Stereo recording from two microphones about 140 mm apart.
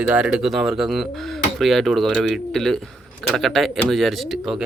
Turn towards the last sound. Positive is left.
turn(degrees=0)  # may be behind; listen again after turning